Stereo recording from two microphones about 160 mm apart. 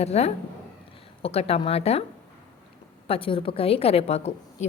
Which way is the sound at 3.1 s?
35° left (ahead or behind).